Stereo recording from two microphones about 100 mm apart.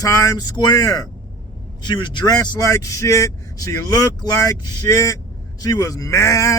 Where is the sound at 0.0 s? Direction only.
35° left (ahead or behind).